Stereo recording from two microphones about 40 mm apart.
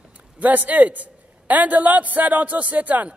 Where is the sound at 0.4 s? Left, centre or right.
Right.